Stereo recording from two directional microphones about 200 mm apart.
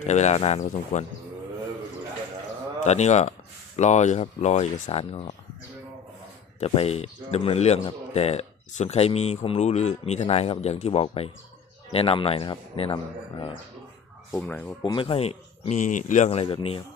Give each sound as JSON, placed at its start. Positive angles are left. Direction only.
{"t": 0.0, "sound": "speech", "side_deg": 35}
{"t": 2.8, "sound": "speech", "side_deg": 35}
{"t": 6.6, "sound": "speech", "side_deg": 30}
{"t": 14.3, "sound": "speech", "side_deg": 10}
{"t": 14.8, "sound": "speech", "side_deg": 25}